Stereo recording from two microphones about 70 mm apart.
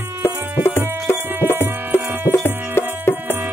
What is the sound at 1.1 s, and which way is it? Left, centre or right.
Music, left.